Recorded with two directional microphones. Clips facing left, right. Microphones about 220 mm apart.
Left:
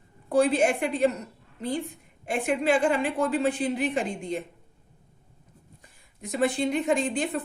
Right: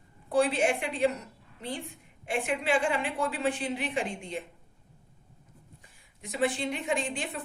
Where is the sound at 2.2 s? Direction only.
40° left (ahead or behind).